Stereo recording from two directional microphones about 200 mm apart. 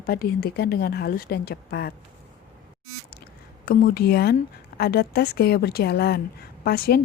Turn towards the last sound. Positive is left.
turn(degrees=50)  # may be behind; listen again after turning